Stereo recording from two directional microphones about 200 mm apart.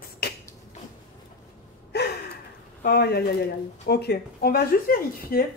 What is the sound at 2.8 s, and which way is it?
A woman's voice, 50° left (ahead or behind).